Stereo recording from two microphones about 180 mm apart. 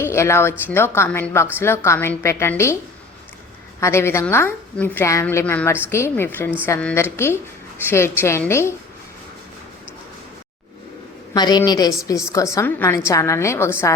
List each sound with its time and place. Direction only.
0.0 s a woman's voice: 15° left (ahead or behind)
3.8 s a woman's voice: 15° left (ahead or behind)
11.3 s a woman's voice: 20° left (ahead or behind)